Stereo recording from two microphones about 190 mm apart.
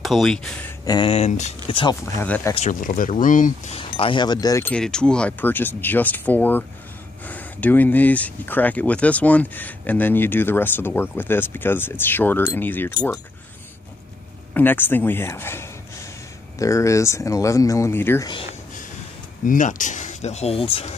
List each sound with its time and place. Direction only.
0.0 s speech: centre (ahead or behind)
0.8 s speech: 25° left (ahead or behind)
2.2 s speech: 10° left (ahead or behind)
2.5 s speech: 40° left (ahead or behind)
3.7 s speech: 30° left (ahead or behind)
4.7 s speech: 5° left (ahead or behind)
14.5 s speech: 10° left (ahead or behind)
19.4 s speech: 45° left (ahead or behind)